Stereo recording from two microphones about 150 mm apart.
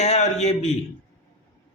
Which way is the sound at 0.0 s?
50° left (ahead or behind).